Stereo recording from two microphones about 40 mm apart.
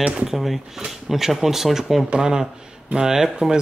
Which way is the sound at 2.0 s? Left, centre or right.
Centre.